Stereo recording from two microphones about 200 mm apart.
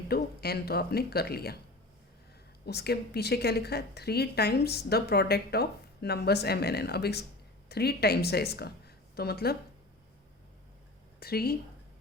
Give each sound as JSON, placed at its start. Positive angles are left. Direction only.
{"t": 0.1, "sound": "a woman's voice", "side_deg": 50}
{"t": 2.6, "sound": "a woman's voice", "side_deg": 55}
{"t": 11.2, "sound": "a woman's voice", "side_deg": 50}